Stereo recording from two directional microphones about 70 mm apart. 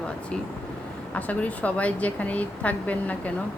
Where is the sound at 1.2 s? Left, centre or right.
Left.